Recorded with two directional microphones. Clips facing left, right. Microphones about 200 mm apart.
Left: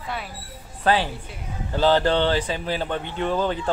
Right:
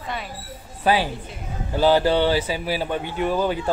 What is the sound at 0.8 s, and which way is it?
Speech, 10° right (ahead or behind).